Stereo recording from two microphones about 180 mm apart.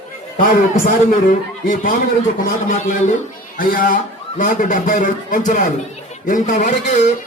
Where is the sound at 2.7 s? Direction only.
45° left (ahead or behind).